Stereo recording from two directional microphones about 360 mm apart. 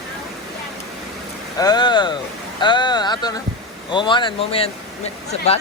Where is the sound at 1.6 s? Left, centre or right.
Centre.